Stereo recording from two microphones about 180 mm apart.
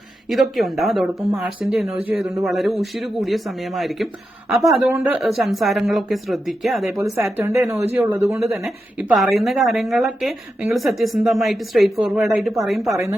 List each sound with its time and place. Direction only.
0.3 s a woman's voice: centre (ahead or behind)
7.0 s speech: 15° right (ahead or behind)
9.0 s a woman's voice: centre (ahead or behind)